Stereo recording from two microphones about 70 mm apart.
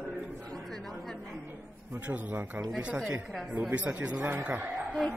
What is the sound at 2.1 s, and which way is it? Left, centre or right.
Speech, right.